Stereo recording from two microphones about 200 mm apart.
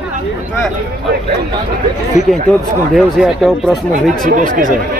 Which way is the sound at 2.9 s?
Centre (ahead or behind).